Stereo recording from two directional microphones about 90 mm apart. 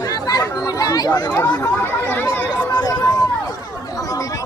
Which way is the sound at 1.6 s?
25° left (ahead or behind).